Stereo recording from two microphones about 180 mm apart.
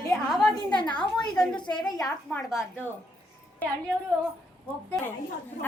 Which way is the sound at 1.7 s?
20° left (ahead or behind).